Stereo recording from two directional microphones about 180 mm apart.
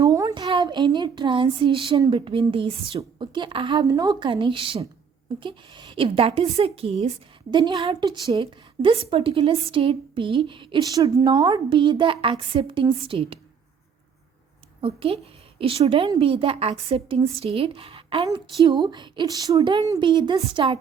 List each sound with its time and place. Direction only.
0.0 s a child's voice: 20° right (ahead or behind)
14.8 s a woman's voice: 30° right (ahead or behind)